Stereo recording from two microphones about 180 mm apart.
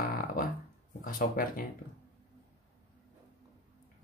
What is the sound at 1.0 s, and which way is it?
Speech, 50° left (ahead or behind).